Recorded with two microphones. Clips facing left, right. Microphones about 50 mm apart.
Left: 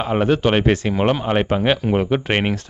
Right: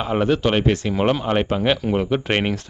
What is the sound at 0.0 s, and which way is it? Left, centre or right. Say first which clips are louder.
Speech: left 2 dB; centre.